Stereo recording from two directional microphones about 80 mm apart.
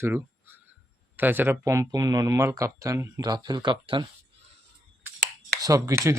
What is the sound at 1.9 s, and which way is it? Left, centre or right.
Speech, right.